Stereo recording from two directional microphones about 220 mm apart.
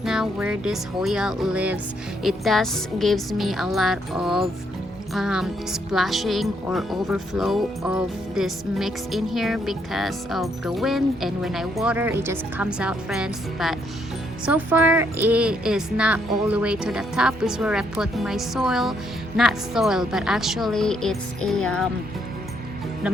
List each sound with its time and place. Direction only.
0.0 s speech: centre (ahead or behind)
23.0 s music: 5° right (ahead or behind)